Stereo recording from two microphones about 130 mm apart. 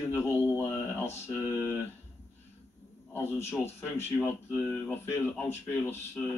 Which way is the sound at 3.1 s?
20° left (ahead or behind).